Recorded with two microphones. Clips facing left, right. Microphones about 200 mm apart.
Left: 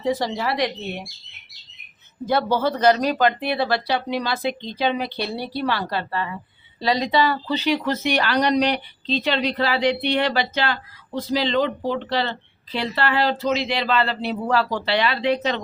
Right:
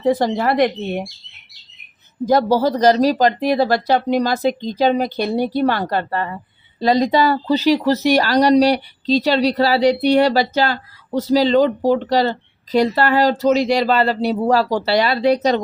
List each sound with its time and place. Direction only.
0.0 s speech: 50° right (ahead or behind)
2.2 s speech: 40° right (ahead or behind)